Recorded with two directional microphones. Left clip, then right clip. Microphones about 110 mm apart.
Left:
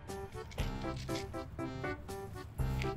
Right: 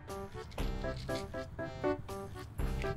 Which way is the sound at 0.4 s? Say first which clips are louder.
Right 1 dB; centre (ahead or behind).